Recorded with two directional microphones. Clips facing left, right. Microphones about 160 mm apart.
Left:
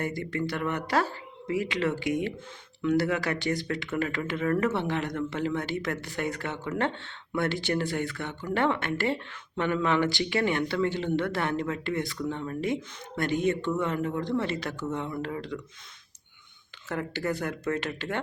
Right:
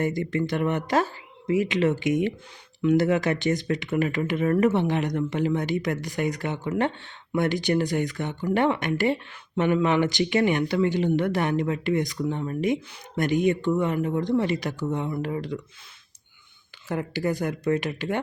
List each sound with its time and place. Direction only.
0.0 s speech: 20° right (ahead or behind)
16.9 s speech: 15° right (ahead or behind)